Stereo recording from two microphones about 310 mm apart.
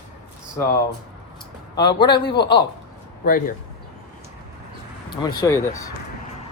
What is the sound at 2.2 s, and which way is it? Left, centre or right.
Speech, left.